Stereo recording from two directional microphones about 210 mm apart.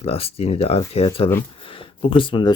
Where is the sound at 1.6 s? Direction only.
25° left (ahead or behind).